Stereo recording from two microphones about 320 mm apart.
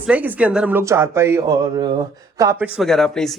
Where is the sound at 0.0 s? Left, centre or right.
Centre.